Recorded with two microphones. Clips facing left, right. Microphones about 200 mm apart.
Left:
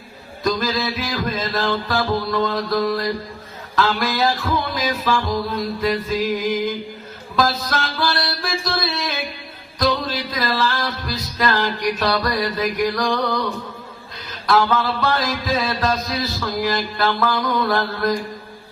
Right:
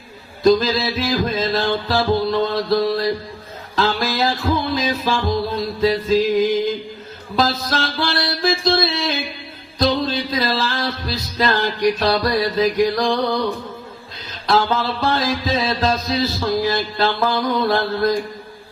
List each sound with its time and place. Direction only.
0.4 s music: 25° right (ahead or behind)
14.4 s music: 25° right (ahead or behind)